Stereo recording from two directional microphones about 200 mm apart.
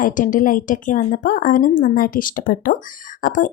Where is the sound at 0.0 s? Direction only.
40° left (ahead or behind).